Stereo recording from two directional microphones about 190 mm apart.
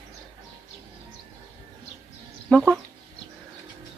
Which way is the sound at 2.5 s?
Centre (ahead or behind).